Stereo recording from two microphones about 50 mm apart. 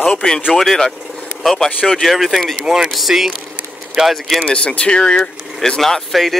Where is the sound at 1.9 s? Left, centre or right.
Centre.